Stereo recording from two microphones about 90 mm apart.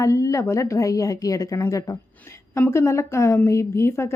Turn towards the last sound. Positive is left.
turn(degrees=30)  # may be behind; listen again after turning